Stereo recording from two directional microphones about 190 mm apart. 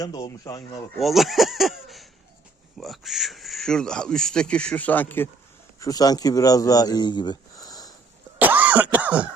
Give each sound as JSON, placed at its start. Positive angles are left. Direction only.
{"t": 0.0, "sound": "speech", "side_deg": 20}
{"t": 0.9, "sound": "speech", "side_deg": 0}
{"t": 8.4, "sound": "cough", "side_deg": -10}